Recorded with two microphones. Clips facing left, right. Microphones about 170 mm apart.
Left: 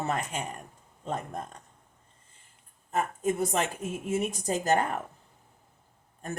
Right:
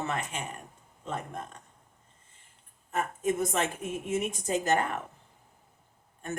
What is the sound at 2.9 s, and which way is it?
Speech, 35° left (ahead or behind).